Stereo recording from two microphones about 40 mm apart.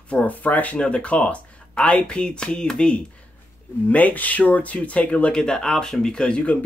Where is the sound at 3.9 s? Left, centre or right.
Left.